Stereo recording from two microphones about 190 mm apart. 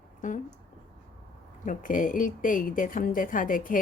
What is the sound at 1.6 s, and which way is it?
A woman's voice, 45° left (ahead or behind).